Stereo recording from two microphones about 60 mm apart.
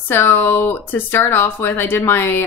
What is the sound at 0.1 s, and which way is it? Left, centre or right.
Speech, left.